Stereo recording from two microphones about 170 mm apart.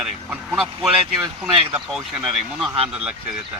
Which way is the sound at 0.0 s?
Centre (ahead or behind).